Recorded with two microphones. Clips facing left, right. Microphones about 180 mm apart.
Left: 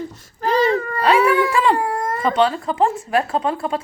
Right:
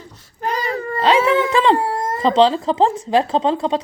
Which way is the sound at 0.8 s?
25° right (ahead or behind).